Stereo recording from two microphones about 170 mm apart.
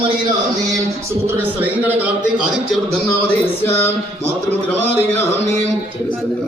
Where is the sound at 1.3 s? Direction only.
10° right (ahead or behind).